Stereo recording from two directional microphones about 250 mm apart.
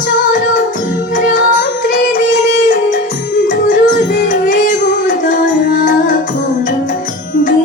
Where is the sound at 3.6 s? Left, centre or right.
Left.